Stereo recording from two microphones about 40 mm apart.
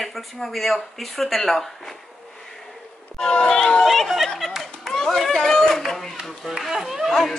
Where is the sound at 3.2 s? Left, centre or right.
Centre.